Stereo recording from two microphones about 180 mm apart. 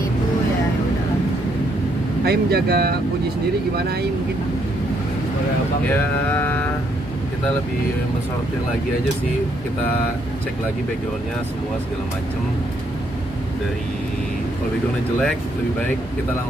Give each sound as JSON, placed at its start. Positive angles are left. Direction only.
{"t": 2.2, "sound": "speech", "side_deg": -60}
{"t": 5.9, "sound": "speech", "side_deg": 10}